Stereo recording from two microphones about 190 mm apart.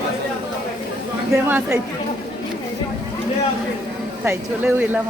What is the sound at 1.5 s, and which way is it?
Speech, 10° right (ahead or behind).